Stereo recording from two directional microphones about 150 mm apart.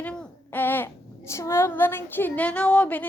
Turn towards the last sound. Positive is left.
turn(degrees=10)  # may be behind; listen again after turning